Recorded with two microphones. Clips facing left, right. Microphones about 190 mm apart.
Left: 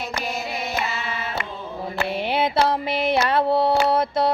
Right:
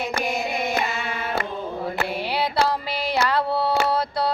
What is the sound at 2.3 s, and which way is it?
Mantra, 20° left (ahead or behind).